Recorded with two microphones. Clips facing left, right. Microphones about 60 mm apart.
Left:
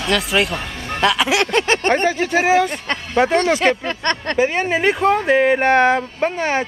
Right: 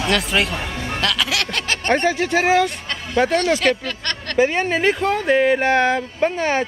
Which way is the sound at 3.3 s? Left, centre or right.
Left.